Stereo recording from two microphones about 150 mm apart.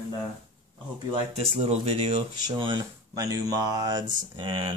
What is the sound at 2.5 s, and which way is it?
Speech, 30° right (ahead or behind).